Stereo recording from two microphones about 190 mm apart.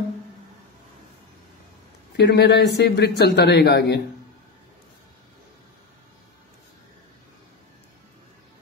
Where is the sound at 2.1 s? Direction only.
60° left (ahead or behind).